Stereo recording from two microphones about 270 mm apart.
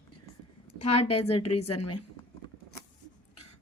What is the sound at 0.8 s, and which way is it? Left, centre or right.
Speech, left.